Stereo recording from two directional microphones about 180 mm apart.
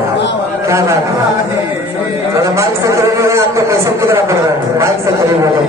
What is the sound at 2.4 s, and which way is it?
A man's voice, 15° right (ahead or behind).